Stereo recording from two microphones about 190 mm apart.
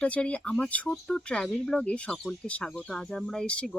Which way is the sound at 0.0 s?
5° left (ahead or behind).